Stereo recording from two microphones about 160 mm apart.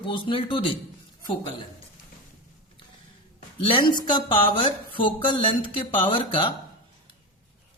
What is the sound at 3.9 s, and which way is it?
Speech, 30° left (ahead or behind).